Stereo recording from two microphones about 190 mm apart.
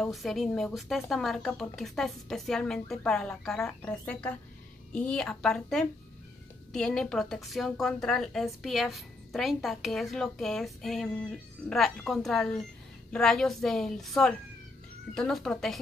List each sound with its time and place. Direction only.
0.0 s a woman's voice: centre (ahead or behind)